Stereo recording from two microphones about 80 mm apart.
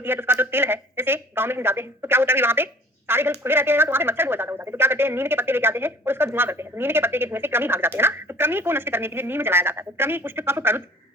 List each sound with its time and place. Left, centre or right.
0.0 s speech: right